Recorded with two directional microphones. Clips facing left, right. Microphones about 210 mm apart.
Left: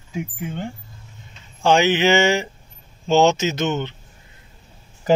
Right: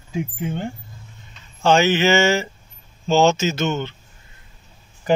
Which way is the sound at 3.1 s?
20° left (ahead or behind).